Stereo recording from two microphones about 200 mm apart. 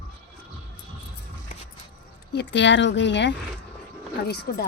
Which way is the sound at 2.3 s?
60° left (ahead or behind).